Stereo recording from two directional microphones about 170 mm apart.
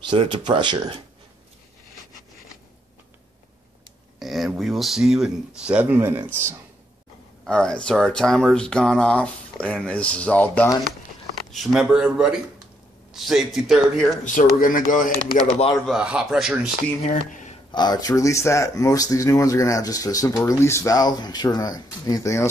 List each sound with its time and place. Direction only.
0.0 s speech: 30° right (ahead or behind)
4.2 s speech: centre (ahead or behind)
7.4 s speech: 5° left (ahead or behind)
11.5 s speech: centre (ahead or behind)
14.2 s speech: 50° left (ahead or behind)
15.9 s speech: 5° right (ahead or behind)
17.1 s speech: 50° left (ahead or behind)
17.7 s speech: 25° left (ahead or behind)